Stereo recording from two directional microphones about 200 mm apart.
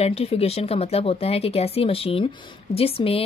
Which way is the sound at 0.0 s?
30° left (ahead or behind).